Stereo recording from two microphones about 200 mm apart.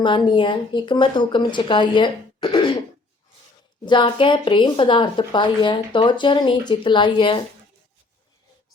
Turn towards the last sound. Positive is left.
turn(degrees=25)  # may be behind; listen again after turning